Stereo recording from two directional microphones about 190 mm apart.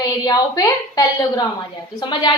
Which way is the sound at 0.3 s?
20° left (ahead or behind).